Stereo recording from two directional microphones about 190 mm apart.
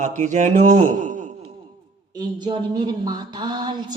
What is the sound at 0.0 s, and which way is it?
Speech, 40° right (ahead or behind).